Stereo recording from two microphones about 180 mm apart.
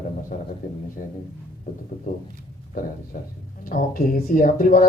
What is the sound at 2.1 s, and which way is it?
Speech, 45° left (ahead or behind).